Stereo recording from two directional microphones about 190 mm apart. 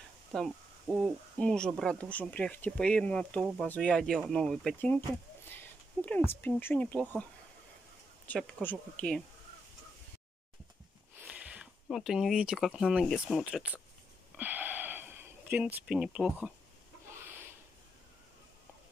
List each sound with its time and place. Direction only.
0.3 s speech: 5° left (ahead or behind)
6.0 s speech: 10° left (ahead or behind)
8.3 s speech: 5° left (ahead or behind)
11.1 s speech: 5° right (ahead or behind)
14.3 s wheeze: 10° right (ahead or behind)
15.5 s speech: 5° right (ahead or behind)